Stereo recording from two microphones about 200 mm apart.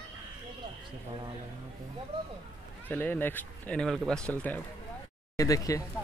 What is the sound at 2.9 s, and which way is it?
Speech, 10° left (ahead or behind).